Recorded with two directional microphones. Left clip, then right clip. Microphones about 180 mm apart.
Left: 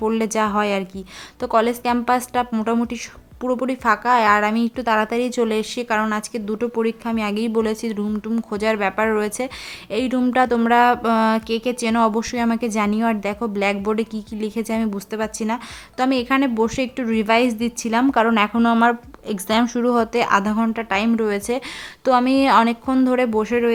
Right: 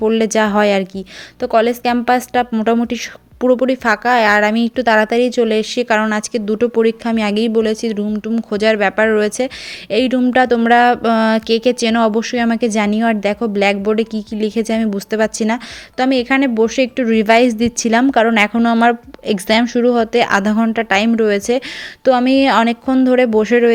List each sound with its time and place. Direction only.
0.0 s speech: 15° right (ahead or behind)
1.4 s speech: 10° right (ahead or behind)